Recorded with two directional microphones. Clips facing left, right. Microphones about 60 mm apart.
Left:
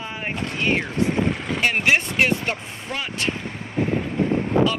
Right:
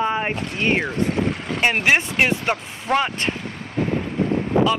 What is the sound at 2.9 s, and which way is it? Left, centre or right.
Speech, right.